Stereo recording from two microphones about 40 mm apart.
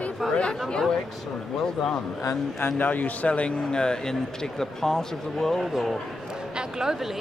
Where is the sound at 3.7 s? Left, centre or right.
Centre.